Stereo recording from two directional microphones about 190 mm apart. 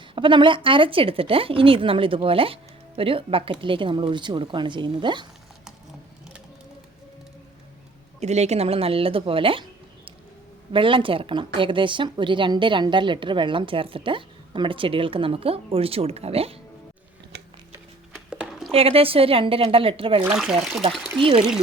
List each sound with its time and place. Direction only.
0.1 s a woman's voice: 25° right (ahead or behind)
8.2 s a woman's voice: 35° right (ahead or behind)
10.7 s a woman's voice: 25° right (ahead or behind)
17.3 s a sound: 60° right (ahead or behind)
18.1 s a sound: 5° right (ahead or behind)
18.7 s a woman's voice: 30° right (ahead or behind)
20.3 s speech: centre (ahead or behind)
21.2 s a woman's voice: 25° right (ahead or behind)